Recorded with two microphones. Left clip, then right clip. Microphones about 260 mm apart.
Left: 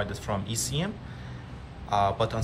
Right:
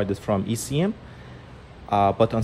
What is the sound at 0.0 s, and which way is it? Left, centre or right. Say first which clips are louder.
Speech: right 7 dB; right.